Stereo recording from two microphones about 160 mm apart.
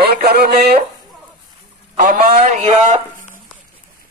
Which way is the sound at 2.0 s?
55° right (ahead or behind).